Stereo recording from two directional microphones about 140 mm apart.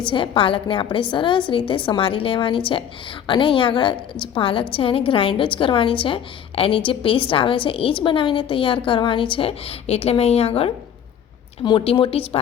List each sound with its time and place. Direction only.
0.0 s a woman's voice: 35° left (ahead or behind)